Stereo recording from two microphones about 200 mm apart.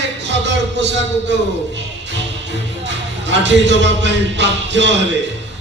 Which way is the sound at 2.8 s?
60° right (ahead or behind).